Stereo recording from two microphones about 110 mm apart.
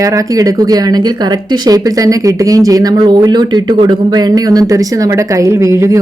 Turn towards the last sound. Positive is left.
turn(degrees=-30)  # may be behind; listen again after turning